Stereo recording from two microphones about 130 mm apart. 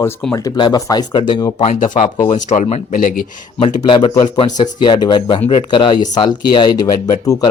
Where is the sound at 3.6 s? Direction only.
40° left (ahead or behind).